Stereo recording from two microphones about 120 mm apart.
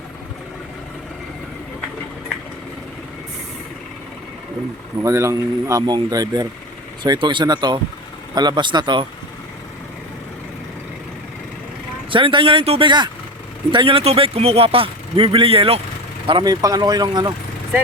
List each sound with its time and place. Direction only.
5.0 s speech: 25° right (ahead or behind)
12.1 s speech: 45° right (ahead or behind)
16.4 s speech: 35° right (ahead or behind)